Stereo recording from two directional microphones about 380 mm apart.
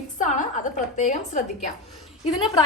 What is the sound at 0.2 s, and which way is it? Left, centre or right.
A woman's voice, centre.